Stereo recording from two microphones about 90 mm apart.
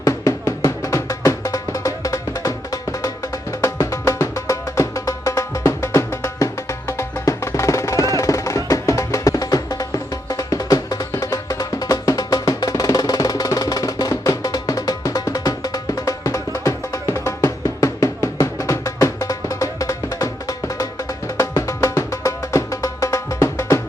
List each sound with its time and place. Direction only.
0.0 s drum: 40° left (ahead or behind)
3.6 s music: 35° left (ahead or behind)